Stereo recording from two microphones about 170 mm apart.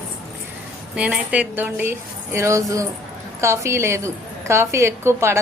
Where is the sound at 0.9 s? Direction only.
5° right (ahead or behind).